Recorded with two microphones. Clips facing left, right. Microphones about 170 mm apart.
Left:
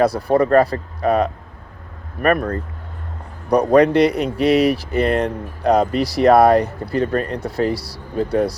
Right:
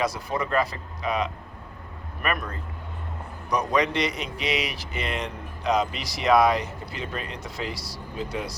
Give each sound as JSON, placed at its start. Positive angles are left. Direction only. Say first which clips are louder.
{"t": 0.0, "sound": "speech", "louder": "left 12 dB", "side_deg": 60}